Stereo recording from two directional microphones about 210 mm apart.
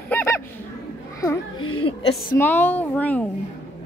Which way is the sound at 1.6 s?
90° left.